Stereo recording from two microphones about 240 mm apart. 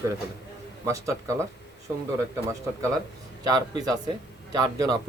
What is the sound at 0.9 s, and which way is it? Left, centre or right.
Speech, centre.